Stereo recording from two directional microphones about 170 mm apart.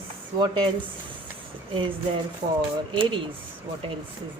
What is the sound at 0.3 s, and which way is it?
Speech, 25° right (ahead or behind).